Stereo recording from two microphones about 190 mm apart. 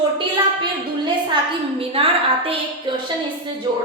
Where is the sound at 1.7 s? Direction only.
30° right (ahead or behind).